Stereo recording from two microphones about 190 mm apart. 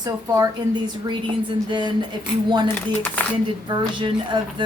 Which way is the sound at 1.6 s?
25° right (ahead or behind).